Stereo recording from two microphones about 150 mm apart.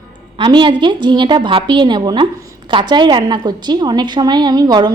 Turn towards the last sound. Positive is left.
turn(degrees=-25)  # may be behind; listen again after turning